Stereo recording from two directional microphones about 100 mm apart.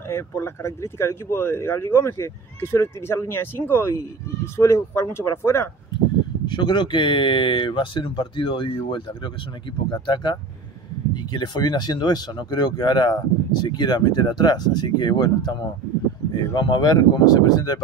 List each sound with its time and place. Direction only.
0.1 s speech: 30° left (ahead or behind)
6.4 s speech: 50° left (ahead or behind)
16.5 s speech: 45° left (ahead or behind)